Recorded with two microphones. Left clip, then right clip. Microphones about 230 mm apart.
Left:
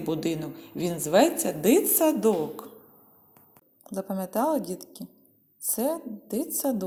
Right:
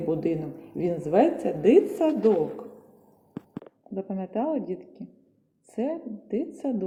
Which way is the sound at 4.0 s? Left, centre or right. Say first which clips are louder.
Left 2 dB; left.